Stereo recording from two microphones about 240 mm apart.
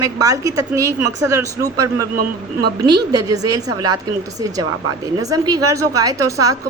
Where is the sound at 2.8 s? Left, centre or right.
Centre.